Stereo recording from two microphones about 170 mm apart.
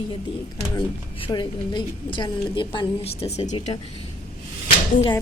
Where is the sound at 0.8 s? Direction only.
25° left (ahead or behind); by 3.8 s 45° left (ahead or behind).